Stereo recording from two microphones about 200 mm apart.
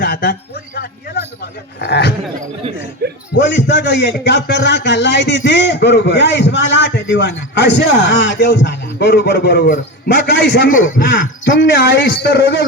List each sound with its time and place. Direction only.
0.0 s speech: 55° left (ahead or behind)
0.8 s a sound: 50° left (ahead or behind)
1.4 s a man's voice: 55° left (ahead or behind)
3.0 s a sound: 55° right (ahead or behind)
3.3 s a man's voice: 60° left (ahead or behind)
10.7 s speech: 40° left (ahead or behind)
11.0 s a man's voice: 65° left (ahead or behind)